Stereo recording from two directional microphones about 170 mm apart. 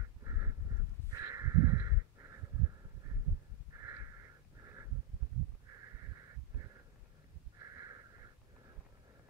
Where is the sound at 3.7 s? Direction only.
15° right (ahead or behind).